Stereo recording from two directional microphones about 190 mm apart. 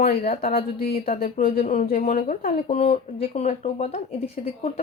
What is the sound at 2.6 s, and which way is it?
Speech, 35° left (ahead or behind).